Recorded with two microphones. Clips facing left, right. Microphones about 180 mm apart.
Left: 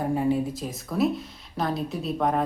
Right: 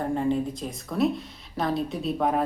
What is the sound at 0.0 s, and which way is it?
A woman's voice, 5° left (ahead or behind).